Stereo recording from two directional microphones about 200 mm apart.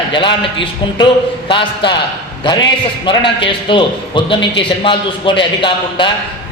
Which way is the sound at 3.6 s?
25° left (ahead or behind).